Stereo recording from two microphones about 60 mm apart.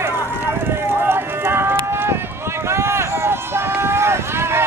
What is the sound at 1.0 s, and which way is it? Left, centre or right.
Run, right.